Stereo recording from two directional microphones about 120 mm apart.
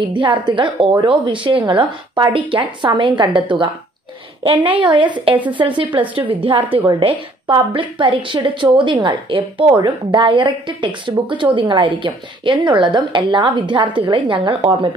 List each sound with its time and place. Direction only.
0.0 s a woman's voice: 40° right (ahead or behind)